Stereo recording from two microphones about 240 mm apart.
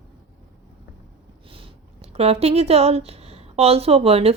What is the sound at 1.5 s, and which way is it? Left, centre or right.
Speech, right.